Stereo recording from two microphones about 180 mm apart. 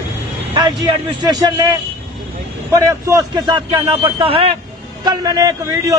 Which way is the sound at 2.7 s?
15° right (ahead or behind).